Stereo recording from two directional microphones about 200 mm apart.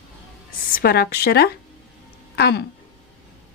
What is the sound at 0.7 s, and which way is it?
A woman's voice, 45° left (ahead or behind).